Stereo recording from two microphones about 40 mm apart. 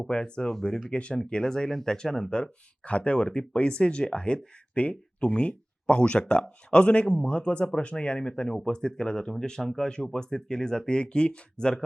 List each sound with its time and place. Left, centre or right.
0.1 s speech: left
1.3 s speech: centre
2.3 s speech: left